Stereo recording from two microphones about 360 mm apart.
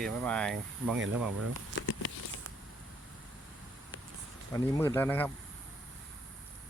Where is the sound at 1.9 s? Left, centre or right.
Left.